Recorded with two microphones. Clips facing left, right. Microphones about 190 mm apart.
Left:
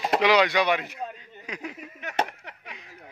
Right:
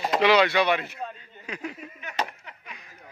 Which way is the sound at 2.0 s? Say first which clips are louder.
Left 4 dB; 70° left (ahead or behind).